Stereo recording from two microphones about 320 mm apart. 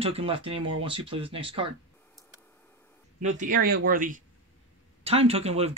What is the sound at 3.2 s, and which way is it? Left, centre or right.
Speech, right.